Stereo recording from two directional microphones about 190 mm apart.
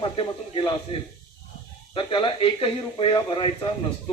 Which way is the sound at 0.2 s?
30° left (ahead or behind).